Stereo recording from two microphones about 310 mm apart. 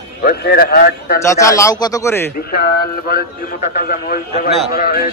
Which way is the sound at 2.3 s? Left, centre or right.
Left.